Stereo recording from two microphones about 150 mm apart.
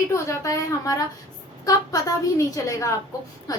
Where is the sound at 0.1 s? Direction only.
20° left (ahead or behind).